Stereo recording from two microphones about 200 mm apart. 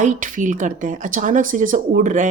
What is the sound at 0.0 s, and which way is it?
Speech, 40° right (ahead or behind).